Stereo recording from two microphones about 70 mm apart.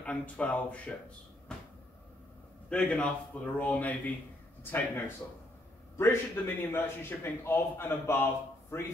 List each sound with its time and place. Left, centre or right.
0.0 s speech: centre
2.7 s a man's voice: centre; by 8.8 s left